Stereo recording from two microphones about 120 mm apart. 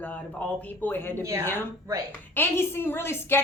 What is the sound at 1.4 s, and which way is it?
Speech, 20° left (ahead or behind).